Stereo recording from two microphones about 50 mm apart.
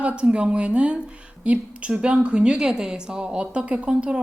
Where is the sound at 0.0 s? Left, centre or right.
Right.